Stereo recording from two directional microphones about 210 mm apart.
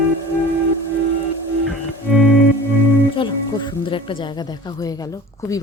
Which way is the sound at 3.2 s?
20° left (ahead or behind).